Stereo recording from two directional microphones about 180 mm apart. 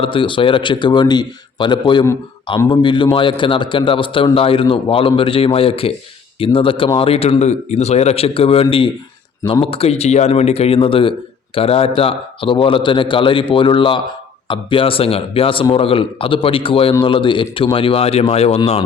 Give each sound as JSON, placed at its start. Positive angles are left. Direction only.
{"t": 0.0, "sound": "a man's voice", "side_deg": 30}